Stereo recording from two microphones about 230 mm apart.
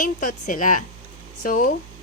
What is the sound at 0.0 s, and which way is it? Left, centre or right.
A woman's voice, left.